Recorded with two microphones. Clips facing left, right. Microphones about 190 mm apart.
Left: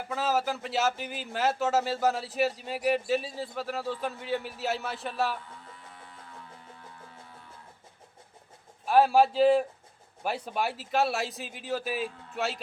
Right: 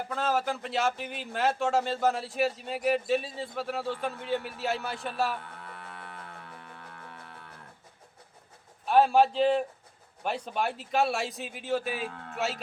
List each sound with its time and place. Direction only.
0.1 s speech: 5° left (ahead or behind)
5.4 s a sound: 65° right (ahead or behind)
8.9 s speech: 5° left (ahead or behind)
12.0 s a man's voice: 65° right (ahead or behind)